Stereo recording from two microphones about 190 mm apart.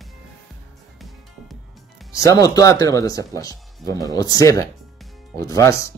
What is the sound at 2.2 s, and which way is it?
Speech, 15° left (ahead or behind).